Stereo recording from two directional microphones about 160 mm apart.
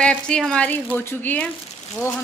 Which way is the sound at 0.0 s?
5° left (ahead or behind).